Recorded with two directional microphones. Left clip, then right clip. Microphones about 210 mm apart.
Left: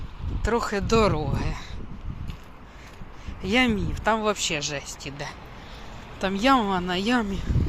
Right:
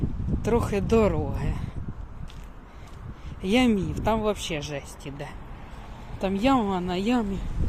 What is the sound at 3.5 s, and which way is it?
Speech, 25° right (ahead or behind).